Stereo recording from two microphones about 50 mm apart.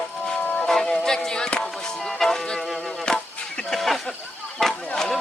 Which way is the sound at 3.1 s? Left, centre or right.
Centre.